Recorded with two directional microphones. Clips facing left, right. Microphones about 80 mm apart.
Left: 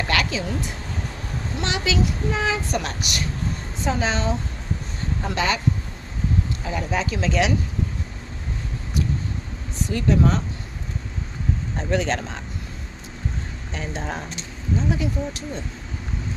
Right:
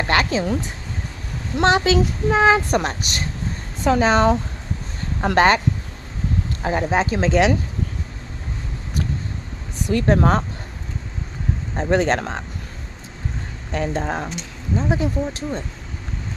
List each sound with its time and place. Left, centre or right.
0.1 s speech: right
1.6 s speech: right
4.0 s speech: right
6.6 s speech: right
9.9 s speech: right
11.8 s speech: right
13.7 s speech: right
14.8 s speech: right